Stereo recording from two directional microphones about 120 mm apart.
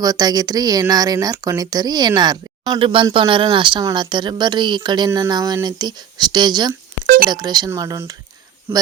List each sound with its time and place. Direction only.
0.0 s speech: 35° right (ahead or behind)